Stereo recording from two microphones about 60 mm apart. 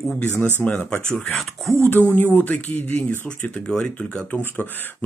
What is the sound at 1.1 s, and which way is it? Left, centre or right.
Speech, centre.